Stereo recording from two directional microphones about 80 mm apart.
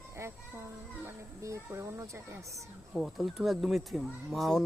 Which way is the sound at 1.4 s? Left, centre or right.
Right.